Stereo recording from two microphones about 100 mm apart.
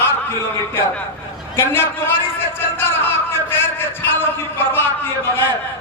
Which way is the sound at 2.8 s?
25° left (ahead or behind).